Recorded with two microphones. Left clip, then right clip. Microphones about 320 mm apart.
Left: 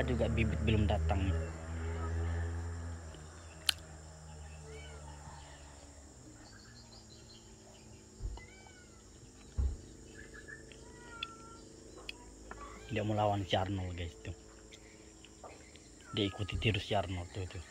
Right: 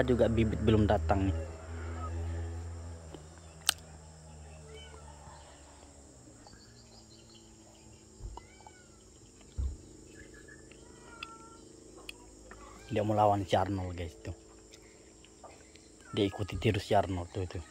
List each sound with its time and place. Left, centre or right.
0.0 s speech: centre
3.7 s a sound: centre
12.9 s speech: centre
16.1 s speech: centre